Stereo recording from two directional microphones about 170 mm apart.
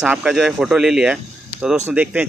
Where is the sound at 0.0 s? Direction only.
5° right (ahead or behind).